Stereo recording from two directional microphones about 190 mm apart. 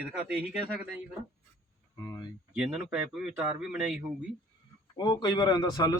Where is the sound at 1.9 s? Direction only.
15° left (ahead or behind).